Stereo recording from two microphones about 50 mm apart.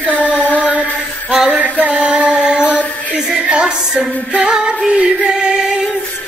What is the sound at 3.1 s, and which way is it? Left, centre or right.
Music, centre.